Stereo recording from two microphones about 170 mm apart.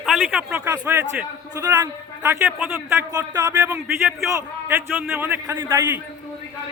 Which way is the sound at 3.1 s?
20° right (ahead or behind).